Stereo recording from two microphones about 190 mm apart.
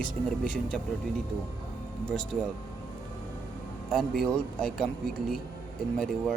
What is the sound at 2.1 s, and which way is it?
Speech, 5° left (ahead or behind).